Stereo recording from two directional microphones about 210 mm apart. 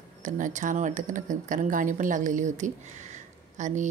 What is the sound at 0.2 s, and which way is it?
A woman's voice, 35° right (ahead or behind).